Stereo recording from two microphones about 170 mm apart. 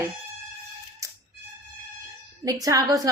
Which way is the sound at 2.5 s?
20° right (ahead or behind).